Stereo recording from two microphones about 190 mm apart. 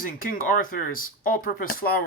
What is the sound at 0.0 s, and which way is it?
Speech, 45° left (ahead or behind).